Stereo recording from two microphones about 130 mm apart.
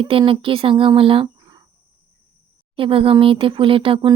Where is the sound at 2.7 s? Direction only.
45° right (ahead or behind).